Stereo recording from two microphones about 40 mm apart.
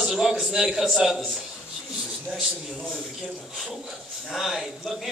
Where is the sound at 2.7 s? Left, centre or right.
Centre.